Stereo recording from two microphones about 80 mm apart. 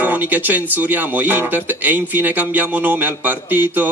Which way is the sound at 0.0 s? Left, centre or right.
Right.